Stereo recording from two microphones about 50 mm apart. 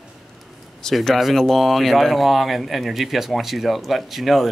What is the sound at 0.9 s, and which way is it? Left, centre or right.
Speech, centre.